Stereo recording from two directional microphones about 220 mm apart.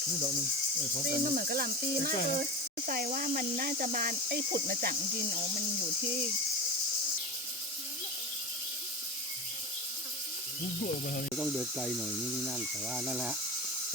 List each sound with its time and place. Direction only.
1.0 s speech: 40° right (ahead or behind)
11.3 s speech: centre (ahead or behind)